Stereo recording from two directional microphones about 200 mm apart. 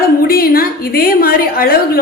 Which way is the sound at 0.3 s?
50° left (ahead or behind).